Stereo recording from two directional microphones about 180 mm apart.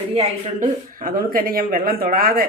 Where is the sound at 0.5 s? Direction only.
50° right (ahead or behind).